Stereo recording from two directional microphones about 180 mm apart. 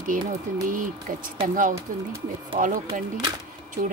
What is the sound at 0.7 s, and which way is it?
Speech, 50° right (ahead or behind).